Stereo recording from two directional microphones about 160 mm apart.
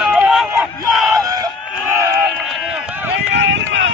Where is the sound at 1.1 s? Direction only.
25° right (ahead or behind).